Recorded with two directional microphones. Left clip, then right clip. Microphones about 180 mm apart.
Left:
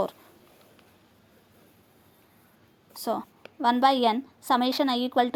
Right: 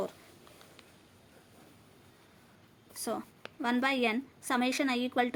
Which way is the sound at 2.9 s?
25° left (ahead or behind).